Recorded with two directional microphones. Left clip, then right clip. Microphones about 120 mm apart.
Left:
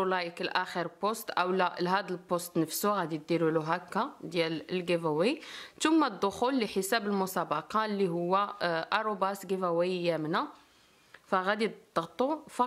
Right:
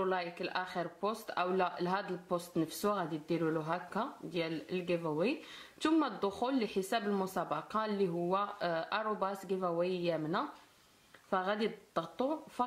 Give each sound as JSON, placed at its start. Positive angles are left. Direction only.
{"t": 0.0, "sound": "speech", "side_deg": 50}